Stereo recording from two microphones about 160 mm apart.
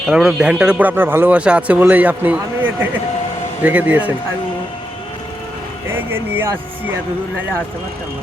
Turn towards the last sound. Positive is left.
turn(degrees=-15)  # may be behind; listen again after turning